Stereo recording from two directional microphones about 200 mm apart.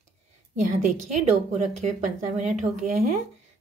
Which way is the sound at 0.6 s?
40° right (ahead or behind).